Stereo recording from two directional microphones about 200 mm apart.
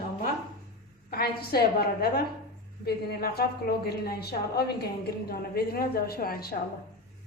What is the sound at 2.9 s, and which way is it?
A woman's voice, 50° left (ahead or behind).